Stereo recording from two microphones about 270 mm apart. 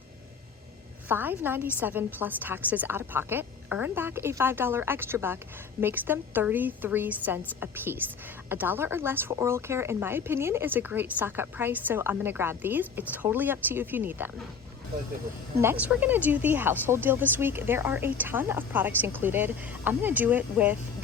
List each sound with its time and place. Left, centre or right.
1.0 s a woman's voice: centre
15.6 s a woman's voice: centre